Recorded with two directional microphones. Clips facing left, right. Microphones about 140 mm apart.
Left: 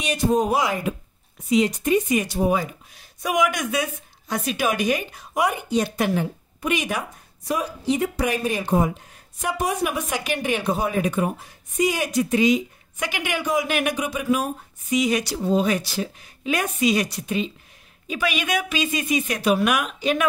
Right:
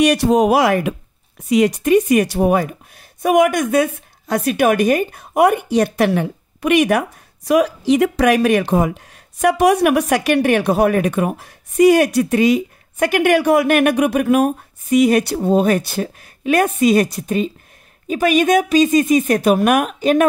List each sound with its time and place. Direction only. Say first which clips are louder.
0.0 s a woman's voice: right 8 dB; 75° right (ahead or behind); by 20.2 s 45° right (ahead or behind)